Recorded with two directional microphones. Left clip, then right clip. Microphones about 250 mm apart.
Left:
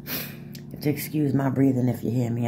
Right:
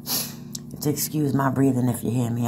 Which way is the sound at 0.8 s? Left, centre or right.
Centre.